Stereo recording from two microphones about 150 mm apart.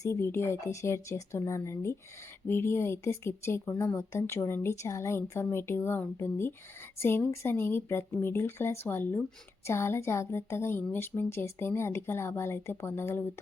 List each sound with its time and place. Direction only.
0.0 s speech: 15° left (ahead or behind)